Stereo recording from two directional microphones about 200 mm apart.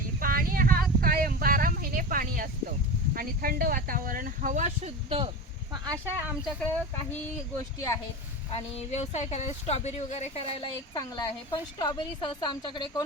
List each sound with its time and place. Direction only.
0.2 s a sound: 45° right (ahead or behind)
3.2 s speech: 45° right (ahead or behind); by 5.3 s 30° right (ahead or behind)
5.7 s speech: 20° right (ahead or behind)
8.5 s speech: 30° left (ahead or behind)
10.9 s a woman's voice: 20° left (ahead or behind)